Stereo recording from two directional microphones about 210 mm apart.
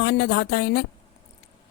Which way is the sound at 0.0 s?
55° left (ahead or behind).